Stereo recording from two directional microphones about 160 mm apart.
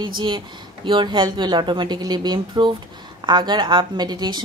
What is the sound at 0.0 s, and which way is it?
A woman's voice, 30° right (ahead or behind).